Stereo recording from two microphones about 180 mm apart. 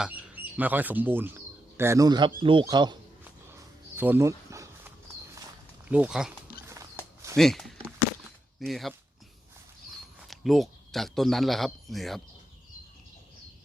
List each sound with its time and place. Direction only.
0.0 s speech: 10° right (ahead or behind)
3.9 s insect: 10° right (ahead or behind)
5.9 s speech: 5° right (ahead or behind)
7.3 s speech: centre (ahead or behind)
10.2 s speech: centre (ahead or behind)